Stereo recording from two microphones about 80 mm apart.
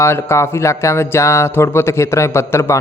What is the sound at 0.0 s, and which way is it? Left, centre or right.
Speech, left.